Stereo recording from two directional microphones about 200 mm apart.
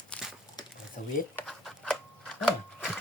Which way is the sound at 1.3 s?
Centre (ahead or behind).